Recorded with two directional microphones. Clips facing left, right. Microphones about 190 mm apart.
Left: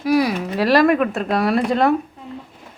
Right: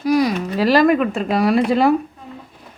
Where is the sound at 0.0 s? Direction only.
5° left (ahead or behind).